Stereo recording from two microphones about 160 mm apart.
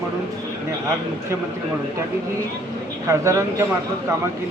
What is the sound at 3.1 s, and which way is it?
Speech, 20° right (ahead or behind).